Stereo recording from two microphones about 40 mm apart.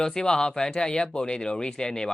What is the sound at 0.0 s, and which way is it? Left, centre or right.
Speech, centre.